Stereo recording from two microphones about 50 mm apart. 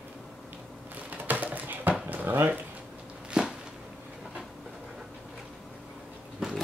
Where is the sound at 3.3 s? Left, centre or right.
Centre.